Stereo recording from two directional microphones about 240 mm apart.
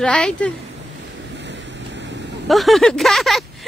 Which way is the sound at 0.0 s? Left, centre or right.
Centre.